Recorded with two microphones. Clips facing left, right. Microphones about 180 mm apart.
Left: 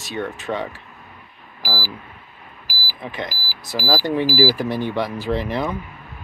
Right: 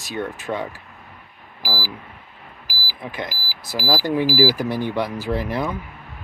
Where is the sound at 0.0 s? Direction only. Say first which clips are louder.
Left 1 dB; 10° right (ahead or behind).